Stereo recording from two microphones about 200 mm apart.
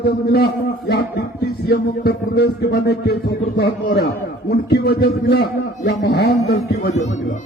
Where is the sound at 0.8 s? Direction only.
55° left (ahead or behind).